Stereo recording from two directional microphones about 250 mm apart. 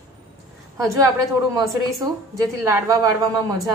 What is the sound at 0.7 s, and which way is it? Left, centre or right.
Speech, centre.